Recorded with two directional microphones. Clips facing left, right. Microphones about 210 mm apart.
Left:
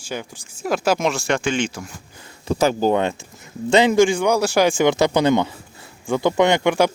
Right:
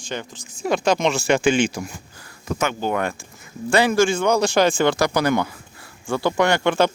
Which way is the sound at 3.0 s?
20° left (ahead or behind).